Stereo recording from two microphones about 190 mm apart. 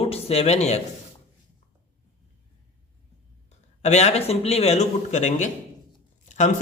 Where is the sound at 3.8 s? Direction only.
35° left (ahead or behind).